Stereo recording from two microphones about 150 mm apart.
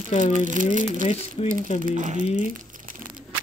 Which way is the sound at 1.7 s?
60° right (ahead or behind).